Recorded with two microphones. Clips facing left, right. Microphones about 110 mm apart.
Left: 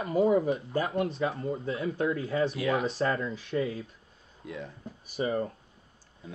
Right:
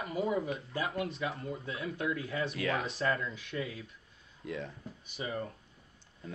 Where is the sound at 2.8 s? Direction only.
30° left (ahead or behind).